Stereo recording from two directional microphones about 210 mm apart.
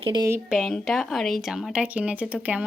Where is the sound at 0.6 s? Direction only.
Centre (ahead or behind).